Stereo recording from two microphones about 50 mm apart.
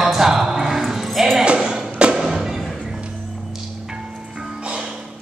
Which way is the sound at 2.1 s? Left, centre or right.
Centre.